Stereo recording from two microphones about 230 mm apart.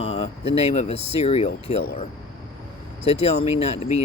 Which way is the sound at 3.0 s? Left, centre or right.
Left.